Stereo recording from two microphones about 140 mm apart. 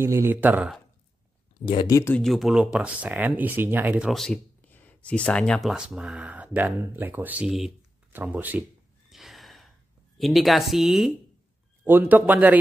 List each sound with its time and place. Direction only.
0.0 s speech: 20° right (ahead or behind)
1.9 s speech: 20° left (ahead or behind)
2.1 s speech: centre (ahead or behind)
4.1 s speech: 5° left (ahead or behind)
9.1 s gasp: centre (ahead or behind)
10.1 s speech: centre (ahead or behind)
11.8 s speech: 15° right (ahead or behind)